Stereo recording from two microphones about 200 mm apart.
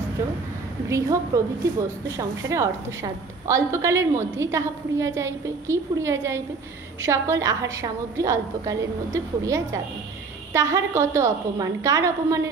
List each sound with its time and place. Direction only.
0.8 s a woman's voice: 15° right (ahead or behind)